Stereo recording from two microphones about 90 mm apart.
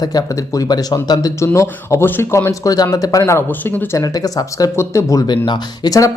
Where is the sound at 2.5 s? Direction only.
40° left (ahead or behind).